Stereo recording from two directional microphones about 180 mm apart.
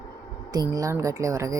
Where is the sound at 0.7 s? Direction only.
20° right (ahead or behind).